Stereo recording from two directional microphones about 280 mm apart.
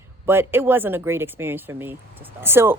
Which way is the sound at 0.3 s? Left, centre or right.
Centre.